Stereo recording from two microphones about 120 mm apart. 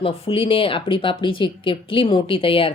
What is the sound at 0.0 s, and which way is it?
Speech, 50° left (ahead or behind).